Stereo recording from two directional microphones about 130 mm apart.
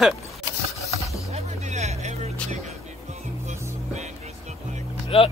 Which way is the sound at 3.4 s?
60° right (ahead or behind).